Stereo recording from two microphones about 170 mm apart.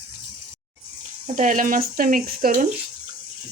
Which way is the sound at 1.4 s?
50° right (ahead or behind).